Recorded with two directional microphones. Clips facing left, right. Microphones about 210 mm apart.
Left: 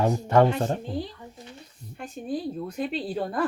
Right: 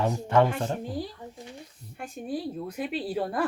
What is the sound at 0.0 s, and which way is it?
Speech, 40° left (ahead or behind).